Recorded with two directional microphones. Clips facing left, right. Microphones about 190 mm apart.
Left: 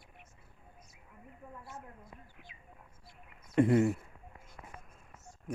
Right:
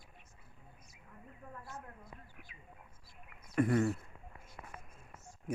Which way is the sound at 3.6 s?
25° left (ahead or behind).